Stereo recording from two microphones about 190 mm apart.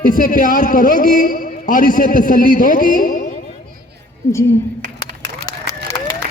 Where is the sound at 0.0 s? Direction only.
45° left (ahead or behind).